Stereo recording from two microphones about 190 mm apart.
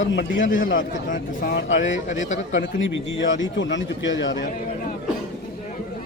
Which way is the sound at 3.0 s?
80° left.